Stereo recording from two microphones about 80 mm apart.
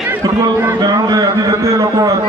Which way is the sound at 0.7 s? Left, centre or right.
Right.